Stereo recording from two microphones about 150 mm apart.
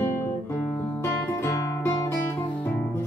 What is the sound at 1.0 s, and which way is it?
Music, 20° left (ahead or behind).